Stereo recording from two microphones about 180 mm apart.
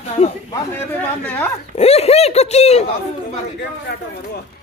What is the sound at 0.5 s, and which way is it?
Speech, 10° left (ahead or behind).